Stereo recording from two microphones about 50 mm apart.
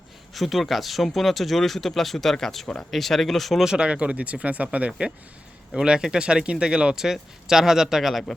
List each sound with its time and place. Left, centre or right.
0.3 s speech: centre
3.7 s speech: centre
4.9 s speech: centre